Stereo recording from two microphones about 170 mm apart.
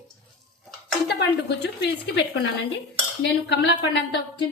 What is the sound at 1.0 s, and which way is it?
A woman's voice, 80° left.